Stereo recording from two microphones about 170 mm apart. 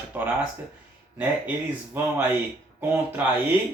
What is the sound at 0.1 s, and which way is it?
Speech, 10° right (ahead or behind).